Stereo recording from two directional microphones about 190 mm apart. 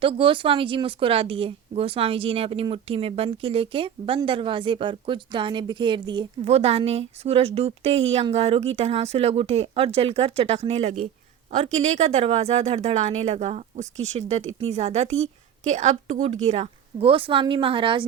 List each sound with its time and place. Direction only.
0.0 s a woman's voice: 30° right (ahead or behind)